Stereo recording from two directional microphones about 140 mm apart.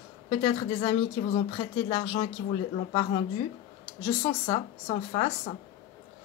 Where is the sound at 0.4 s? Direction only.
40° left (ahead or behind).